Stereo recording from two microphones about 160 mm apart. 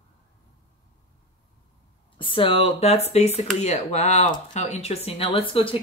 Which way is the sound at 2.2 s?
35° left (ahead or behind).